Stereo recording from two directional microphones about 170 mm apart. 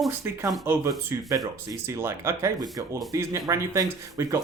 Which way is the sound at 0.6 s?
15° right (ahead or behind).